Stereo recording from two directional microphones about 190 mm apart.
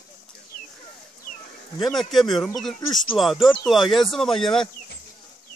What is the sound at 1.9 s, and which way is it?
A man's voice, centre (ahead or behind).